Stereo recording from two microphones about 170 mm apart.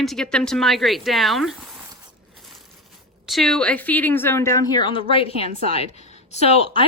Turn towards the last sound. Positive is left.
turn(degrees=40)  # may be behind; listen again after turning